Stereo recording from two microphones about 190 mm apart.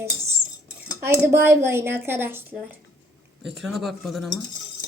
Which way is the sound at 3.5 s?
Centre (ahead or behind).